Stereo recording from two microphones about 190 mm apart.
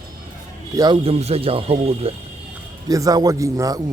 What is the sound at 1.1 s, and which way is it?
Speech, 35° right (ahead or behind).